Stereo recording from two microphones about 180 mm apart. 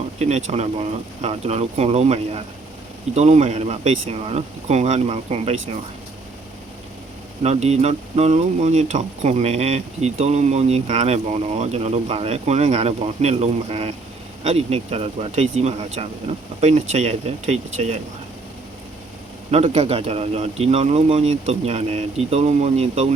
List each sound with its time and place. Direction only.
0.2 s speech: 40° right (ahead or behind)
7.4 s speech: 35° right (ahead or behind)
19.5 s speech: 35° right (ahead or behind)